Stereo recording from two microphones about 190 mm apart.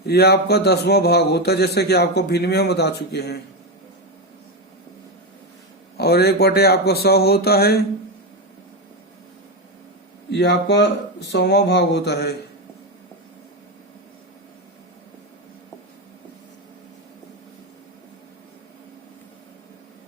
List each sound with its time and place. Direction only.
0.0 s a man's voice: 55° left (ahead or behind)
6.0 s a man's voice: 55° left (ahead or behind)
10.3 s a man's voice: 65° left (ahead or behind)